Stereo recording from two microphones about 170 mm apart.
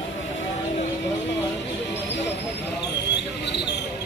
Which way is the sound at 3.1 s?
90° left.